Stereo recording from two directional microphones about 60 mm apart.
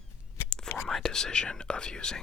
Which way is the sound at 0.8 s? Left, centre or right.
Centre.